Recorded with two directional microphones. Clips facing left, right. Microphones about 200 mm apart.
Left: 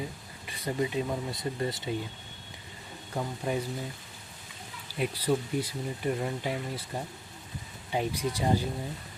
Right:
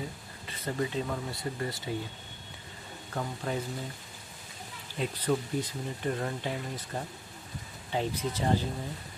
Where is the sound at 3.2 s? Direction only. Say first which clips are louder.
Left 2 dB; 15° left (ahead or behind).